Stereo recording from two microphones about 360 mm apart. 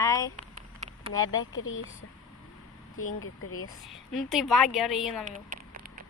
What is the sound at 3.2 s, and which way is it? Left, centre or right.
Speech, left.